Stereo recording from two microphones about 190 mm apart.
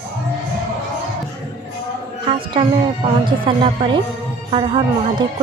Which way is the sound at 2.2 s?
30° right (ahead or behind).